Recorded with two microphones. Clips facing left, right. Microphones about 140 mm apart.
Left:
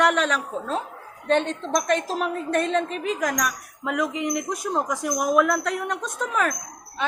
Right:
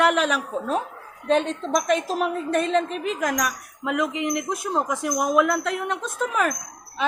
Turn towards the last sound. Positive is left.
turn(degrees=-5)  # may be behind; listen again after turning